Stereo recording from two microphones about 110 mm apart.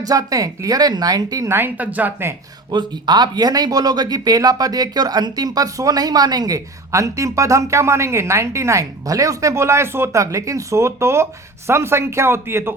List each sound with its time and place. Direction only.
0.0 s speech: 35° right (ahead or behind); by 2.3 s 20° right (ahead or behind)
2.6 s speech: 40° right (ahead or behind); by 12.7 s 20° right (ahead or behind)